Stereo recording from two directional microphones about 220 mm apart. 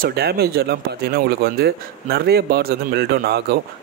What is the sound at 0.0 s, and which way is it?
Speech, 45° right (ahead or behind).